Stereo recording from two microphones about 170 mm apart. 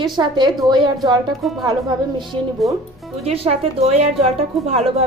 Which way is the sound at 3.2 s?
35° right (ahead or behind).